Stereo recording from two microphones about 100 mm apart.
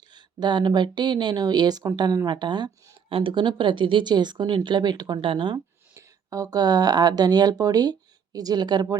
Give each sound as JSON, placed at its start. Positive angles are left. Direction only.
{"t": 0.1, "sound": "speech", "side_deg": -45}
{"t": 3.1, "sound": "speech", "side_deg": -60}
{"t": 5.2, "sound": "speech", "side_deg": -55}
{"t": 5.9, "sound": "speech", "side_deg": -35}